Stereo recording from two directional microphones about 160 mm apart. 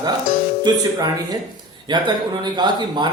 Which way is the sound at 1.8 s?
30° right (ahead or behind).